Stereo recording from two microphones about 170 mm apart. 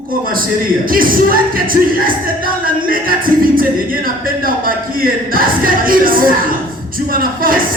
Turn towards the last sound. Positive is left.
turn(degrees=-55)  # may be behind; listen again after turning